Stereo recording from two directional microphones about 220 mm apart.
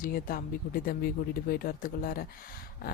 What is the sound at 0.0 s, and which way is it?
A woman's voice, 40° left (ahead or behind).